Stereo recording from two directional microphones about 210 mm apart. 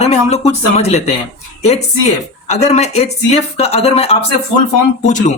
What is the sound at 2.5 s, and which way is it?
Speech, 30° left (ahead or behind).